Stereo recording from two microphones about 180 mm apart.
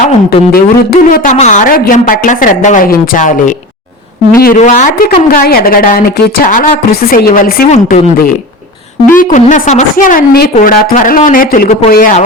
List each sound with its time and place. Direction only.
0.3 s speech: 60° left (ahead or behind)
1.3 s a woman's voice: 40° left (ahead or behind)
9.1 s a woman's voice: 45° left (ahead or behind)